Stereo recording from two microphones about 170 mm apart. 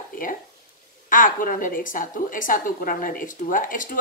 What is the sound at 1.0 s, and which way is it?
A woman's voice, 55° left (ahead or behind).